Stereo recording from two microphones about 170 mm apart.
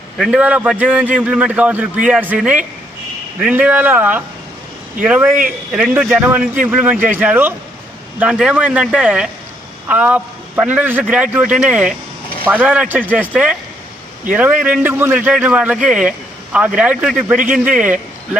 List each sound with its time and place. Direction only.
0.2 s a man's voice: 5° right (ahead or behind)